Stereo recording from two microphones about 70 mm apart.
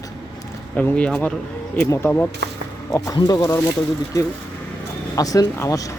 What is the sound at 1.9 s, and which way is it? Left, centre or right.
Speech, left.